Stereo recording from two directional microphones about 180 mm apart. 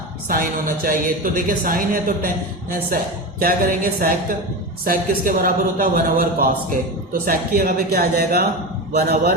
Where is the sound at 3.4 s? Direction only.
50° right (ahead or behind).